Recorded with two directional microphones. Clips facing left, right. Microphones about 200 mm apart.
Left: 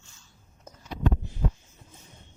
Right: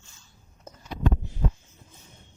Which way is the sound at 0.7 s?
Centre (ahead or behind).